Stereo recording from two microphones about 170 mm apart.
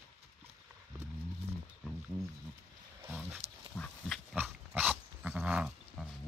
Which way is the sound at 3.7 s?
5° left (ahead or behind).